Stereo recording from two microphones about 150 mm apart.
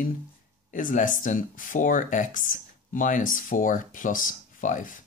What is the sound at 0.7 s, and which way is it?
Speech, 60° left (ahead or behind).